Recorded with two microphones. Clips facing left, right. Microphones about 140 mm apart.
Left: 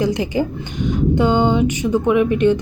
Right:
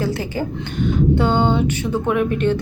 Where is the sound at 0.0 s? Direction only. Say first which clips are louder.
Left 4 dB; 15° left (ahead or behind).